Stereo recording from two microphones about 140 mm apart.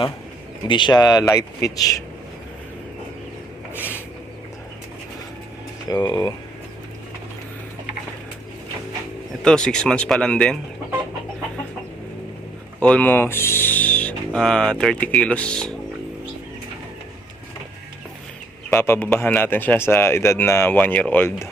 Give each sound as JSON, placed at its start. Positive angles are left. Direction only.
{"t": 0.7, "sound": "speech", "side_deg": 35}
{"t": 5.9, "sound": "speech", "side_deg": 30}
{"t": 9.4, "sound": "speech", "side_deg": 5}
{"t": 12.8, "sound": "speech", "side_deg": 10}
{"t": 18.8, "sound": "speech", "side_deg": 15}